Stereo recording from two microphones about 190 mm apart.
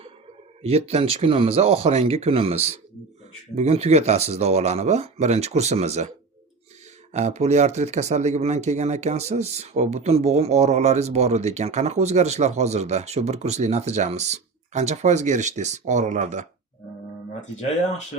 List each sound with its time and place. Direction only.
0.6 s speech: 35° right (ahead or behind)
7.1 s speech: 35° right (ahead or behind)